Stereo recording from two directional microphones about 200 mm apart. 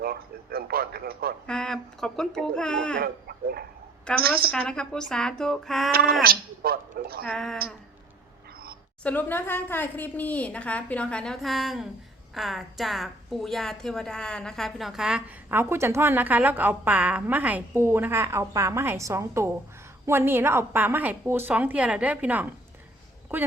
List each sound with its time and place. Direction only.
0.0 s speech: 50° right (ahead or behind)
1.5 s speech: 5° left (ahead or behind)
3.0 s chicken: 50° right (ahead or behind)
4.2 s speech: 50° right (ahead or behind)
4.5 s speech: 5° left (ahead or behind)
6.2 s a woman's voice: 50° right (ahead or behind)
7.3 s speech: centre (ahead or behind)
9.0 s a woman's voice: 10° left (ahead or behind); by 22.4 s 10° right (ahead or behind)